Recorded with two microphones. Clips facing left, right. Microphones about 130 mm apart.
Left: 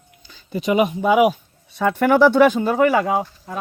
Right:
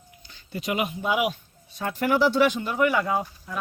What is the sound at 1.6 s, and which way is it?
Speech, 65° left (ahead or behind).